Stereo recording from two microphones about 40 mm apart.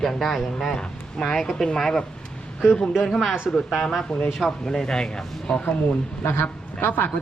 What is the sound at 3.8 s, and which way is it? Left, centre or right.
Speech, centre.